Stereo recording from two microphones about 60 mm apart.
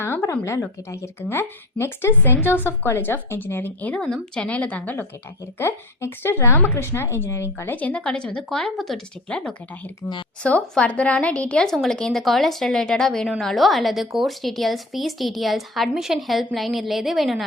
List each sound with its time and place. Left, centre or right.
0.0 s a sound: left
0.3 s speech: left
1.3 s a woman's voice: left
3.9 s a woman's voice: centre
6.1 s a woman's voice: left
7.6 s a woman's voice: left
8.4 s a woman's voice: centre